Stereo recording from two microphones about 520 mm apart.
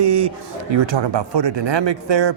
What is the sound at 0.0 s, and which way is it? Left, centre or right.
Speech, right.